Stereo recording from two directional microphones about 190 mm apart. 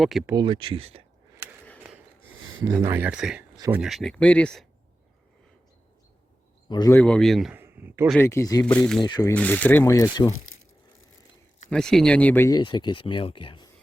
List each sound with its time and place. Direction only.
0.0 s speech: centre (ahead or behind)
0.3 s speech: 25° right (ahead or behind)
2.8 s speech: 10° right (ahead or behind); by 4.6 s 5° left (ahead or behind)
6.7 s a man's voice: 25° left (ahead or behind)
6.9 s speech: 5° left (ahead or behind); by 8.1 s 10° right (ahead or behind)
8.1 s speech: 15° left (ahead or behind)
8.6 s speech: 5° left (ahead or behind)
9.0 s speech: 25° left (ahead or behind)
9.3 s speech: 10° left (ahead or behind)
11.7 s speech: 5° left (ahead or behind); by 13.7 s 25° left (ahead or behind)